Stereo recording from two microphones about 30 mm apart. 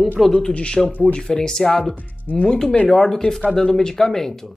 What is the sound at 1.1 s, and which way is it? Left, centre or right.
Speech, left.